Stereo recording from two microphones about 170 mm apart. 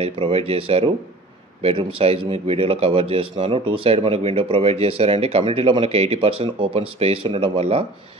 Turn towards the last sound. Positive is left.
turn(degrees=-35)  # may be behind; listen again after turning